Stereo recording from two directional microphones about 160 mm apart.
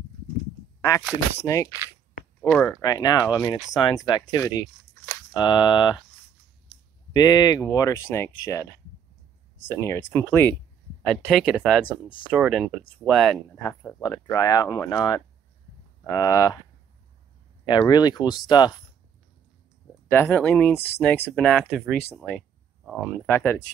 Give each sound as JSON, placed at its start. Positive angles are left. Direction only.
{"t": 1.4, "sound": "speech", "side_deg": 20}
{"t": 2.4, "sound": "speech", "side_deg": 5}
{"t": 2.8, "sound": "speech", "side_deg": 25}
{"t": 7.2, "sound": "speech", "side_deg": 25}
{"t": 9.8, "sound": "speech", "side_deg": 15}
{"t": 11.0, "sound": "speech", "side_deg": 0}
{"t": 13.6, "sound": "speech", "side_deg": 15}
{"t": 17.6, "sound": "speech", "side_deg": 25}
{"t": 20.1, "sound": "speech", "side_deg": 15}
{"t": 23.2, "sound": "speech", "side_deg": 15}